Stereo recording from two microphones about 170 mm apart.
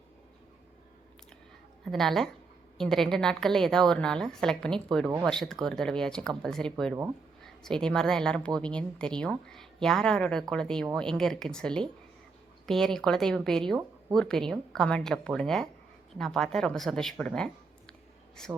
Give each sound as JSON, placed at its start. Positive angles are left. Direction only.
{"t": 1.8, "sound": "a woman's voice", "side_deg": 0}